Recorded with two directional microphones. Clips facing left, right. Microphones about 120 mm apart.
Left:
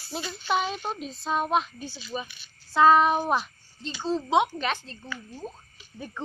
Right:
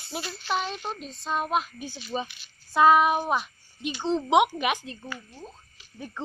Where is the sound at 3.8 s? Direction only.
15° right (ahead or behind).